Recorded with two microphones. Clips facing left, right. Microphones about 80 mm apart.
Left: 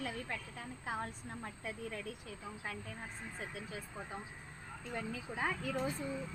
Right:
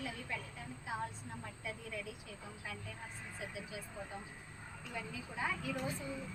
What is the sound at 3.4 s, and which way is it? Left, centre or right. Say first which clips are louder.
Speech: even; left.